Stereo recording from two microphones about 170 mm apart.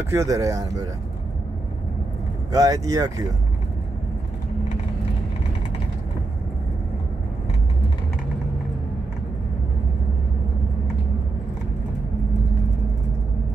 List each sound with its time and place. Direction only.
0.1 s speech: 20° right (ahead or behind)
2.5 s speech: 20° right (ahead or behind)